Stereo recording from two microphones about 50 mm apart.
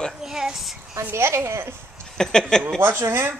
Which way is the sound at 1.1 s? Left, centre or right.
Right.